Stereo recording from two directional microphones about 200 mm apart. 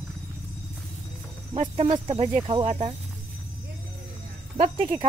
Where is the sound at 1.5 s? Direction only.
30° right (ahead or behind).